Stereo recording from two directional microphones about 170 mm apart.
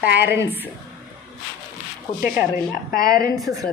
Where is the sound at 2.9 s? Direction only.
60° left (ahead or behind).